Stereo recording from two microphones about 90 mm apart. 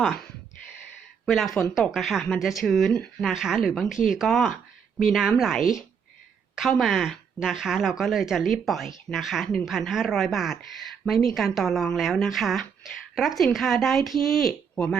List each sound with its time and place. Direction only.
1.2 s a woman's voice: centre (ahead or behind)
3.2 s a woman's voice: 5° right (ahead or behind)